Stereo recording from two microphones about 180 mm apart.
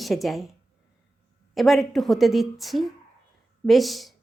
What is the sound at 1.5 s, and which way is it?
A woman's voice, centre (ahead or behind).